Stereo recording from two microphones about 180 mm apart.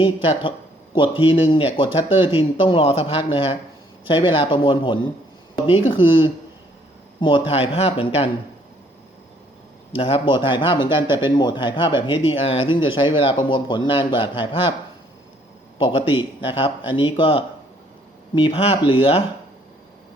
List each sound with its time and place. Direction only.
0.0 s speech: 30° left (ahead or behind)
9.9 s speech: 30° left (ahead or behind)
15.8 s speech: 30° left (ahead or behind)